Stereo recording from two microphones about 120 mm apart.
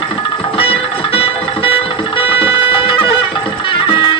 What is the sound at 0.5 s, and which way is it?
Music, 55° left (ahead or behind).